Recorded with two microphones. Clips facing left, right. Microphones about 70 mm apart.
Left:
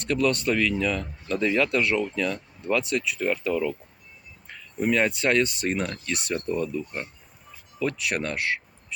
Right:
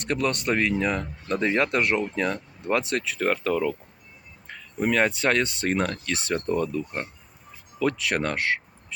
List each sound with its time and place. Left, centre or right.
0.0 s speech: right
3.4 s speech: right
4.4 s a sound: right
5.0 s speech: right
7.8 s speech: right